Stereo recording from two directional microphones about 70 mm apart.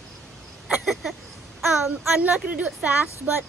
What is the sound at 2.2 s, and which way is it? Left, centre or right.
Speech, right.